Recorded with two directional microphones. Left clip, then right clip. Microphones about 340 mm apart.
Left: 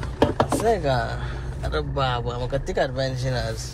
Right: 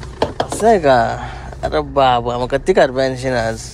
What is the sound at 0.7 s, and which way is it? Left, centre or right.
Speech, right.